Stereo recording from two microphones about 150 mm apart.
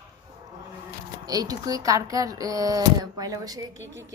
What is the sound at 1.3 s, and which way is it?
Speech, 25° right (ahead or behind).